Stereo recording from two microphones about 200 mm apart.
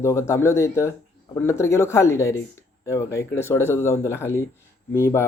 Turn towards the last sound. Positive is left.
turn(degrees=10)  # may be behind; listen again after turning